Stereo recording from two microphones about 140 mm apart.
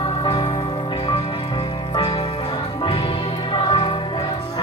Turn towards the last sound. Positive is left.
turn(degrees=35)  # may be behind; listen again after turning